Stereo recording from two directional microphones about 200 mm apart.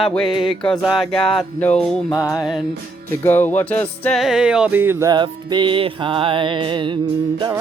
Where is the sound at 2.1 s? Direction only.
15° left (ahead or behind); by 6.9 s 25° right (ahead or behind).